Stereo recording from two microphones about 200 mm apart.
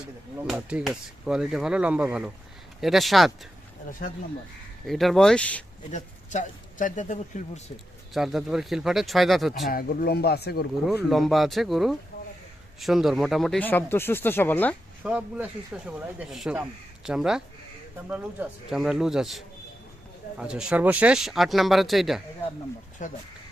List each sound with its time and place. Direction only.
0.0 s speech: 5° right (ahead or behind)
4.9 s speech: centre (ahead or behind)
5.9 s speech: 40° left (ahead or behind)
8.1 s speech: centre (ahead or behind)
9.6 s speech: 50° left (ahead or behind)
10.8 s speech: centre (ahead or behind)
15.0 s speech: 5° right (ahead or behind)
23.0 s speech: 40° left (ahead or behind)